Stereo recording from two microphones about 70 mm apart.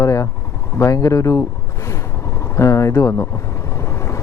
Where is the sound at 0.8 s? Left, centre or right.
Left.